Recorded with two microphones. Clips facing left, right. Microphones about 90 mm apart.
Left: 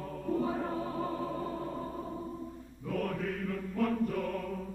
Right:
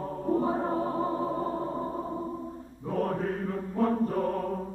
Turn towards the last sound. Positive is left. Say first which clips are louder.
# right 5 dB
turn(degrees=-35)  # may be behind; listen again after turning